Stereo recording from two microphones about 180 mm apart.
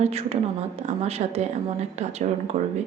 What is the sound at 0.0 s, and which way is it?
Speech, 35° right (ahead or behind).